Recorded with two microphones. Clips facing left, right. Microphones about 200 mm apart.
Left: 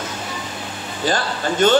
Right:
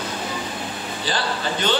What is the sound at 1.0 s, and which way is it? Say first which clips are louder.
Speech: left 5 dB; 45° left (ahead or behind).